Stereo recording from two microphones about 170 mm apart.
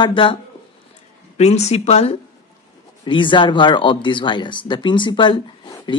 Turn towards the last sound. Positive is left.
turn(degrees=25)  # may be behind; listen again after turning